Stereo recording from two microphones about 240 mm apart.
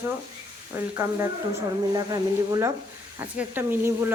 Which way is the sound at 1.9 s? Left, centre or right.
Centre.